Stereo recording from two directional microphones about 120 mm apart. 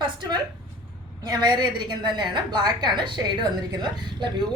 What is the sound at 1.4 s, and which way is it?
A woman's voice, 35° right (ahead or behind).